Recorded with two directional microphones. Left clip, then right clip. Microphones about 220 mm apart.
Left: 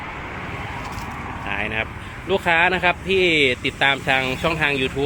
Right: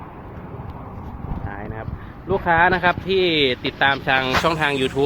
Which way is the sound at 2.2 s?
10° left (ahead or behind).